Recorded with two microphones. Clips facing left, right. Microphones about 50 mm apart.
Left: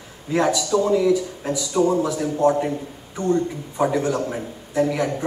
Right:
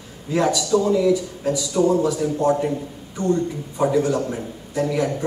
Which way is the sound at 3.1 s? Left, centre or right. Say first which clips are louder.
Even; centre.